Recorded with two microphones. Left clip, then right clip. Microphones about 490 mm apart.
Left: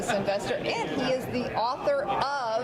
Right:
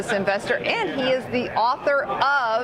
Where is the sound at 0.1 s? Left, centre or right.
Right.